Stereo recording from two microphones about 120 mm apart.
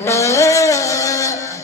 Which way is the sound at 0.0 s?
25° left (ahead or behind).